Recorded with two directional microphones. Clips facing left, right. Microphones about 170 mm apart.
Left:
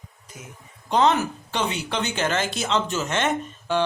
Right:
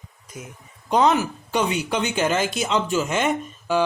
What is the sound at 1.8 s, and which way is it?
Speech, 10° right (ahead or behind).